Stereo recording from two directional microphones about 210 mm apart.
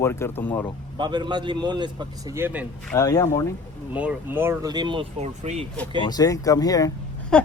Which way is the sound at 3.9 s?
5° right (ahead or behind).